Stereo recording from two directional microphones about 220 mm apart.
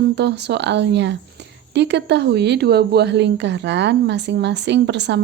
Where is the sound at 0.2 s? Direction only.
50° right (ahead or behind).